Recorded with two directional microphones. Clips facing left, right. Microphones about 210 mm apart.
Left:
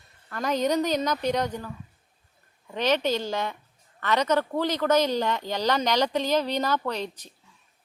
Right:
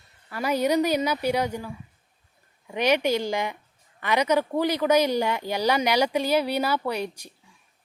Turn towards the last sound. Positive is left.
turn(degrees=-10)  # may be behind; listen again after turning